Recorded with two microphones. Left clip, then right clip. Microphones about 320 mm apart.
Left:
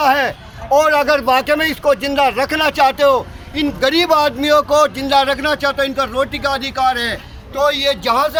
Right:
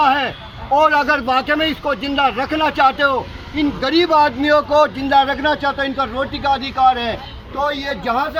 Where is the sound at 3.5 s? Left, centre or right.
Left.